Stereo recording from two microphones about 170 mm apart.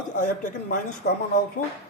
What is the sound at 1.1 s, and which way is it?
Speech, 70° left (ahead or behind).